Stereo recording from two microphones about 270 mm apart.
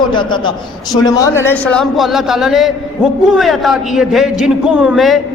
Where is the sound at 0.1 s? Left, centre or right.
Centre.